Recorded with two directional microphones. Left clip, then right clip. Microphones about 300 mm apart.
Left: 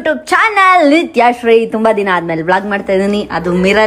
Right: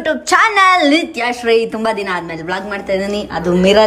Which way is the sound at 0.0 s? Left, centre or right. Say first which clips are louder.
Left 1 dB; centre.